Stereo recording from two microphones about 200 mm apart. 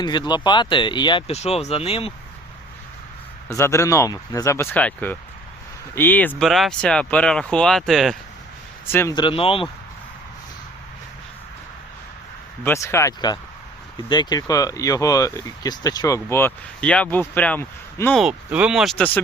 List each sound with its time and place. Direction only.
0.0 s speech: 20° left (ahead or behind)
3.5 s speech: 15° left (ahead or behind)
8.9 s speech: 15° left (ahead or behind)
12.6 s speech: 15° left (ahead or behind)
18.2 s speech: 5° right (ahead or behind)